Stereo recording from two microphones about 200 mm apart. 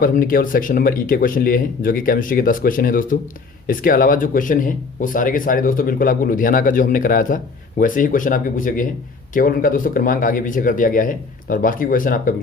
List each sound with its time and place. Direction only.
0.0 s speech: 45° left (ahead or behind)